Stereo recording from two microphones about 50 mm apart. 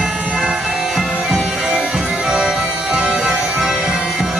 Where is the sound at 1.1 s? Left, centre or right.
Centre.